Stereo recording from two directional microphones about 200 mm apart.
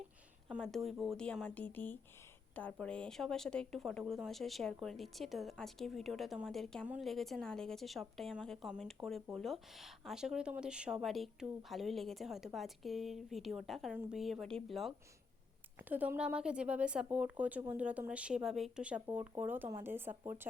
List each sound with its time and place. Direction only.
0.4 s a woman's voice: centre (ahead or behind)